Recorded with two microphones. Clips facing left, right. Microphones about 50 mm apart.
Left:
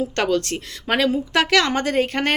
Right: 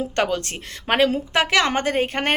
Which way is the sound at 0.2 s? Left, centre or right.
Right.